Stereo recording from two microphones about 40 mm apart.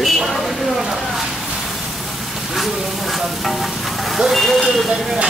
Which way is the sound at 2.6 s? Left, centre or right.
Centre.